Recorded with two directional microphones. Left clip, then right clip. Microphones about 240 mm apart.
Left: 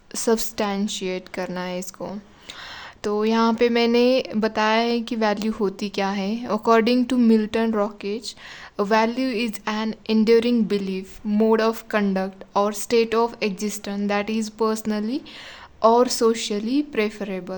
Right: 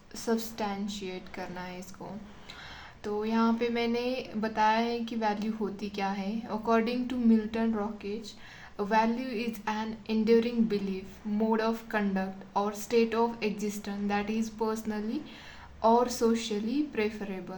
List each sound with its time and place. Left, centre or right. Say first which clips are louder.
0.1 s speech: left 10 dB; left